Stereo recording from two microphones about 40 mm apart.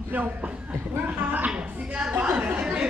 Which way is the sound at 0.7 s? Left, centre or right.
Right.